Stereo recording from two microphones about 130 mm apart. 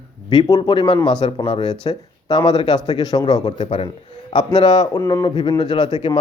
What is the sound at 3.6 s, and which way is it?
Speech, 50° left (ahead or behind).